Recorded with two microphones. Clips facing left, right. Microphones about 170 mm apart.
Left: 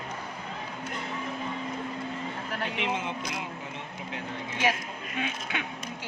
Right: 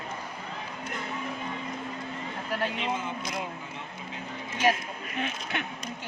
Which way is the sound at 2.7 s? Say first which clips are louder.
Left 1 dB; 65° left (ahead or behind).